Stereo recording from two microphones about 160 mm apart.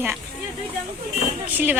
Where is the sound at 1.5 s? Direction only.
10° right (ahead or behind).